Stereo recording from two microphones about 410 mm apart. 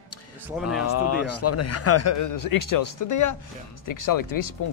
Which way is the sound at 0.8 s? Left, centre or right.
Left.